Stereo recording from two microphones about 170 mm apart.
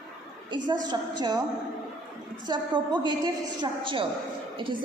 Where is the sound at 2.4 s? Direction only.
25° right (ahead or behind).